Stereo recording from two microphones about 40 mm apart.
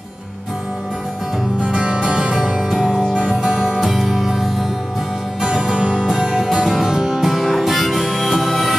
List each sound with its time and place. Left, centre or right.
1.6 s music: centre
2.8 s music: centre
3.2 s music: centre